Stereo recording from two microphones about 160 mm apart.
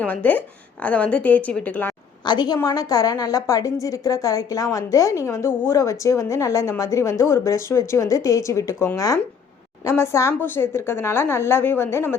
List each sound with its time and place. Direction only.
0.0 s a woman's voice: 10° left (ahead or behind)
2.2 s a woman's voice: 25° left (ahead or behind)